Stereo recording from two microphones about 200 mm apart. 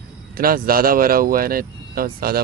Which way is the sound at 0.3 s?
45° right (ahead or behind).